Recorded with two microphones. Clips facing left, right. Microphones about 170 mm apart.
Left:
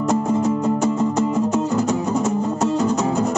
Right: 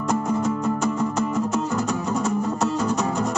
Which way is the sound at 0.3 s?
25° left (ahead or behind).